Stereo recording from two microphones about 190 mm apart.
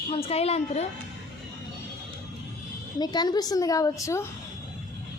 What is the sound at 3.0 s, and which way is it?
A woman's voice, 20° left (ahead or behind).